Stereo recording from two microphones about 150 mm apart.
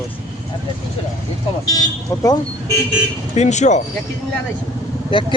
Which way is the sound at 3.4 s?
50° left (ahead or behind).